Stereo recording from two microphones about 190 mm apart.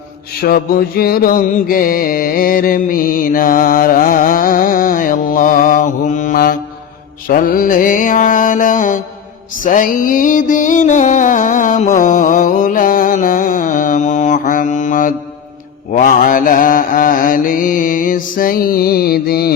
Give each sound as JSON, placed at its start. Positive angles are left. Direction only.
{"t": 0.4, "sound": "mantra", "side_deg": 50}
{"t": 9.6, "sound": "music", "side_deg": 45}
{"t": 15.9, "sound": "mantra", "side_deg": 45}